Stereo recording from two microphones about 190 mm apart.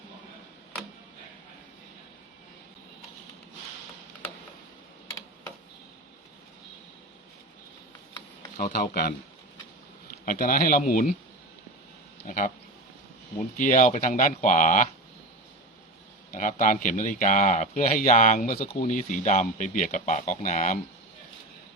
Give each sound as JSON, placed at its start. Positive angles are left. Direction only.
{"t": 8.5, "sound": "speech", "side_deg": 50}
{"t": 10.2, "sound": "speech", "side_deg": 50}
{"t": 13.6, "sound": "speech", "side_deg": 45}
{"t": 16.3, "sound": "speech", "side_deg": 45}